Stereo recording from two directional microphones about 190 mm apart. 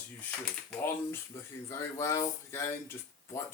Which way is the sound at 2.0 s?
15° left (ahead or behind).